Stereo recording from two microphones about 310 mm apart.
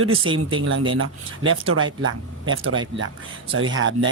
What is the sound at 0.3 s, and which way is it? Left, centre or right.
Speech, right.